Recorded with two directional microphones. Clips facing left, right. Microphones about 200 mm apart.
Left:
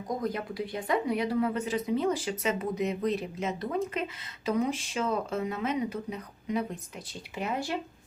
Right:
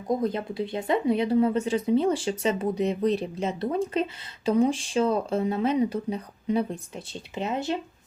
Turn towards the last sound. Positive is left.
turn(degrees=-25)  # may be behind; listen again after turning